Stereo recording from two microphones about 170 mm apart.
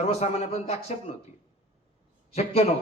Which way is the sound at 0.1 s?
40° left (ahead or behind).